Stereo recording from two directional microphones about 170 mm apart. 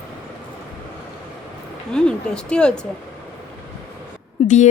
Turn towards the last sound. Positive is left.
turn(degrees=30)  # may be behind; listen again after turning